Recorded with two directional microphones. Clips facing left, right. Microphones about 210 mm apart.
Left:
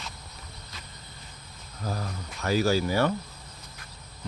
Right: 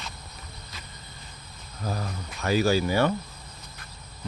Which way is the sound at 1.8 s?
15° right (ahead or behind).